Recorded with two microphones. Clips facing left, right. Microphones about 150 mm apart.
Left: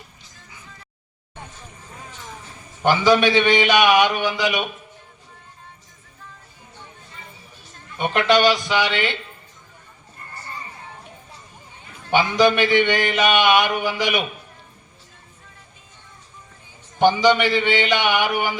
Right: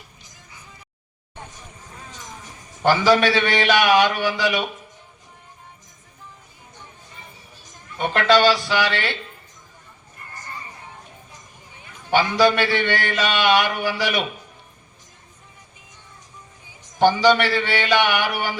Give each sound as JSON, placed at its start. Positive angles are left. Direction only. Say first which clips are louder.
{"t": 1.5, "sound": "vehicle", "louder": "left 1 dB", "side_deg": -15}
{"t": 2.1, "sound": "a sound", "louder": "left 1 dB", "side_deg": -15}
{"t": 2.8, "sound": "a man's voice", "louder": "even", "side_deg": 15}
{"t": 7.9, "sound": "a man's voice", "louder": "even", "side_deg": 15}
{"t": 12.1, "sound": "a man's voice", "louder": "even", "side_deg": 15}
{"t": 17.0, "sound": "a man's voice", "louder": "even", "side_deg": 15}